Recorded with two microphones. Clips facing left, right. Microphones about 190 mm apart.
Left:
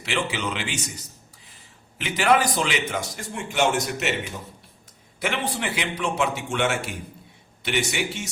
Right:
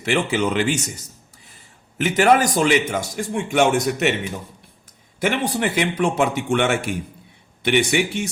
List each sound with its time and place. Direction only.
0.0 s a man's voice: 50° right (ahead or behind)
2.0 s a man's voice: 50° right (ahead or behind)
5.2 s a man's voice: 45° right (ahead or behind)